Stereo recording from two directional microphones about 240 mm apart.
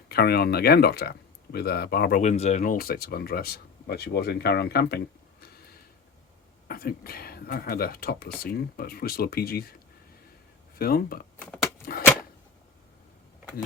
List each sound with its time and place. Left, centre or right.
0.1 s speech: left
6.7 s speech: left
10.8 s speech: left
11.3 s a sound: centre